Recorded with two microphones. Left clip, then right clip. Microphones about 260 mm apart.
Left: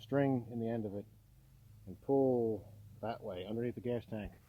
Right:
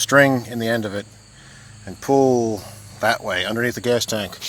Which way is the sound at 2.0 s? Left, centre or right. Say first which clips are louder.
Right 15 dB; right.